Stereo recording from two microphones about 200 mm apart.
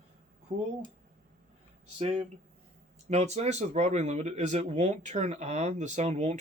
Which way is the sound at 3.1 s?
35° right (ahead or behind).